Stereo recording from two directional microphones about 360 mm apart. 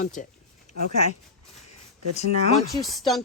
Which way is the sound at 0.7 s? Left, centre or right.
Centre.